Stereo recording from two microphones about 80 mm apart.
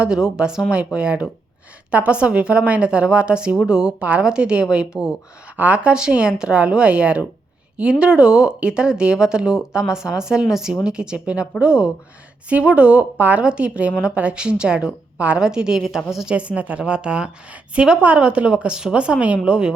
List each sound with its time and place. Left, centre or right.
0.0 s a woman's voice: centre